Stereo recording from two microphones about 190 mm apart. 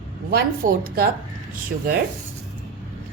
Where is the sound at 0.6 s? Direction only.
45° right (ahead or behind).